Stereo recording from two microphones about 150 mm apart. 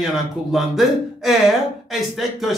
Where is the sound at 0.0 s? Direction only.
Centre (ahead or behind).